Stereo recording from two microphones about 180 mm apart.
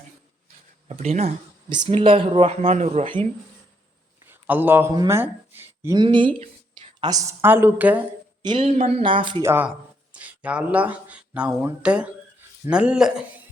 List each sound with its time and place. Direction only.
1.0 s speech: 35° right (ahead or behind)
2.6 s speech: 40° right (ahead or behind)
4.3 s speech: 10° right (ahead or behind)
6.0 s a woman's voice: 25° right (ahead or behind); by 8.0 s 10° right (ahead or behind)
8.4 s speech: 25° right (ahead or behind)
8.6 s speech: 35° right (ahead or behind)
9.4 s a woman's voice: 10° right (ahead or behind)